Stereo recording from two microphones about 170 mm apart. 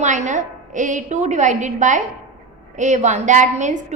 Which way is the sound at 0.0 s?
45° right (ahead or behind).